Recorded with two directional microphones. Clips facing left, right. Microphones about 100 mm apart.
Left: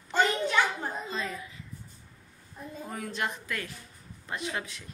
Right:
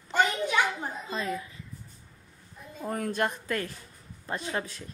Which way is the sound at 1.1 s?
35° right (ahead or behind).